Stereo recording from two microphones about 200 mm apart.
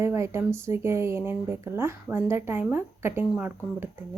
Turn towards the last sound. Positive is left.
turn(degrees=-10)  # may be behind; listen again after turning